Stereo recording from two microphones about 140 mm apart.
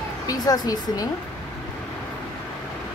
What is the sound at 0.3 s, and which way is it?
Speech, 25° left (ahead or behind).